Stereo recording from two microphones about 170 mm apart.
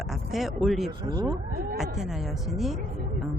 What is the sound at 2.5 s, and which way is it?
Speech, centre (ahead or behind).